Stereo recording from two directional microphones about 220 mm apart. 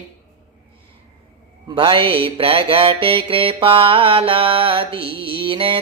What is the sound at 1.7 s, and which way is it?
Mantra, 25° right (ahead or behind).